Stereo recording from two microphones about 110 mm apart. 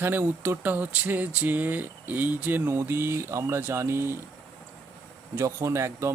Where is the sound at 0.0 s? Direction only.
20° right (ahead or behind).